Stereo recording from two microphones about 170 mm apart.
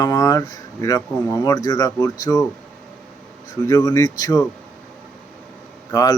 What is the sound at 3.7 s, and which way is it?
Speech, 20° left (ahead or behind).